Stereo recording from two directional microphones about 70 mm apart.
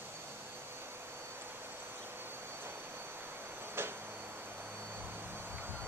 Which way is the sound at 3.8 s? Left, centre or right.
Right.